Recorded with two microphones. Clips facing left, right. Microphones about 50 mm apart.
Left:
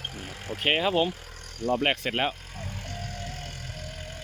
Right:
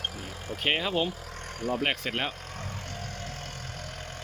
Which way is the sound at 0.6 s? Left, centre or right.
Centre.